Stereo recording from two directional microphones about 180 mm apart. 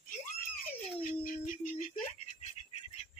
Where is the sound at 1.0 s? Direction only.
50° left (ahead or behind).